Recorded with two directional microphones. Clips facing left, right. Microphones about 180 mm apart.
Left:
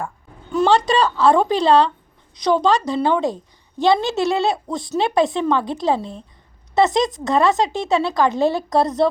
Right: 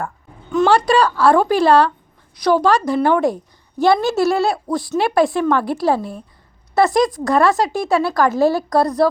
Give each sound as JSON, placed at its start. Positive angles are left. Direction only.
{"t": 0.7, "sound": "speech", "side_deg": 20}